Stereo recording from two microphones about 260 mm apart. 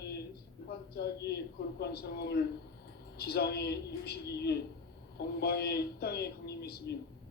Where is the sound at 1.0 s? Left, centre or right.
Left.